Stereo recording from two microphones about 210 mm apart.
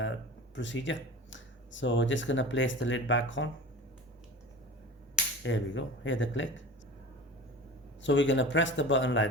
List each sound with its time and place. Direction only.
0.5 s speech: 60° left (ahead or behind)
5.4 s speech: 60° left (ahead or behind)
8.0 s speech: 60° left (ahead or behind)